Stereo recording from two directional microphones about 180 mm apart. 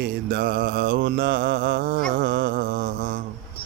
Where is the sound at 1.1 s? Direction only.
90° right.